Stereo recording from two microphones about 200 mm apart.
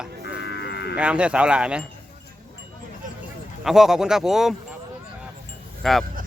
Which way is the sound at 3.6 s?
Centre (ahead or behind).